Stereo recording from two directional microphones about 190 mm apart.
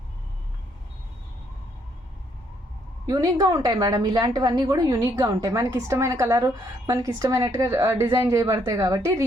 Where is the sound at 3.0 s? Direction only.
20° right (ahead or behind).